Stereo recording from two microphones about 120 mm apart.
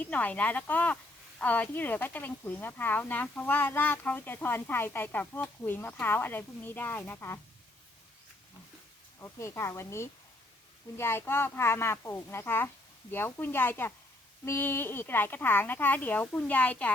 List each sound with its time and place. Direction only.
0.0 s speech: 15° left (ahead or behind)
9.2 s a child's voice: 20° left (ahead or behind)